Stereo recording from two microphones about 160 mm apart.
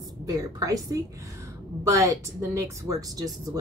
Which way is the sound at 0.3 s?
25° right (ahead or behind).